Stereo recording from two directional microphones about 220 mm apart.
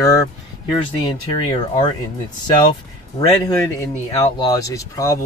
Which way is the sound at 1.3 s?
25° left (ahead or behind).